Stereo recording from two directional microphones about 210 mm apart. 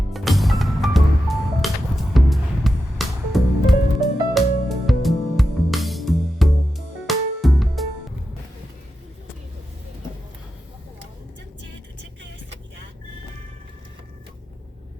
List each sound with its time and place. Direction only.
0.1 s music: centre (ahead or behind)